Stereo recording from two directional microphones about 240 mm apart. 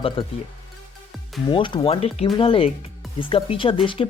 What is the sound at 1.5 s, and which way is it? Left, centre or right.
Speech, centre.